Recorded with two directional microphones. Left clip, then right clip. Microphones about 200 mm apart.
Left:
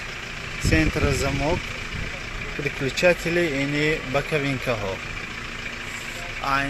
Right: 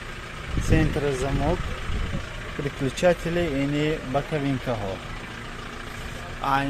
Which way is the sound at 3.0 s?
5° right (ahead or behind).